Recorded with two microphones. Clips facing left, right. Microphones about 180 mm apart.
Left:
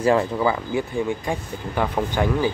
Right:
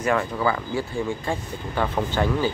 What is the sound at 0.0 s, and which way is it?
Speech, 25° left (ahead or behind).